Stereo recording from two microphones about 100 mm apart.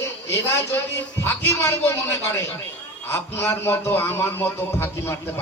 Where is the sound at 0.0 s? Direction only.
25° left (ahead or behind).